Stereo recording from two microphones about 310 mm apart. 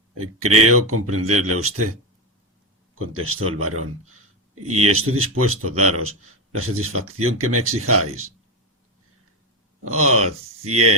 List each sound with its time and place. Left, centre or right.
0.1 s speech: right
3.1 s speech: right
4.9 s speech: right
9.8 s speech: right